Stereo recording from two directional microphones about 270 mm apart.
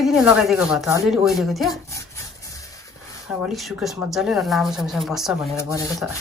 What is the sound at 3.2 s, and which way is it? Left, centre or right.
Speech, centre.